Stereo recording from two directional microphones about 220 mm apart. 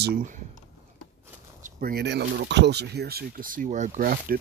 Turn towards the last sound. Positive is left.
turn(degrees=-40)  # may be behind; listen again after turning